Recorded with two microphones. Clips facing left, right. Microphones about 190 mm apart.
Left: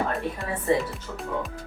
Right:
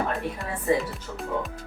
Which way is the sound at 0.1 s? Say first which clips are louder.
Left 1 dB; centre (ahead or behind).